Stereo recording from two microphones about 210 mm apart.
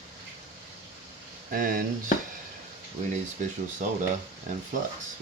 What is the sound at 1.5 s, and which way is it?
Speech, 40° right (ahead or behind).